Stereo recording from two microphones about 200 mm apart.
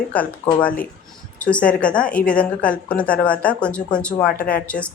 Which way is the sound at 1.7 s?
5° left (ahead or behind).